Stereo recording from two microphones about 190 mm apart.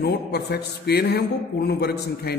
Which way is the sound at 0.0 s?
60° left (ahead or behind).